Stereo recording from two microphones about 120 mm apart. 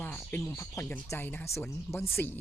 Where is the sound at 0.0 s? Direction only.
10° left (ahead or behind).